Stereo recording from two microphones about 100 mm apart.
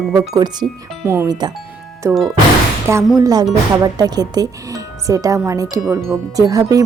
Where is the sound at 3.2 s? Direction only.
40° right (ahead or behind).